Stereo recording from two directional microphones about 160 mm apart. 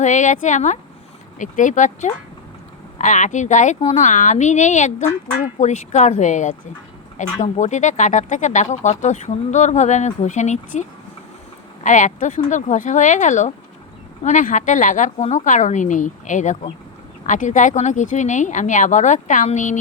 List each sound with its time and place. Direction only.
0.0 s speech: 50° left (ahead or behind)